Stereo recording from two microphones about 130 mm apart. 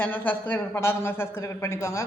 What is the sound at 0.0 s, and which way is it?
A man's voice, 15° left (ahead or behind).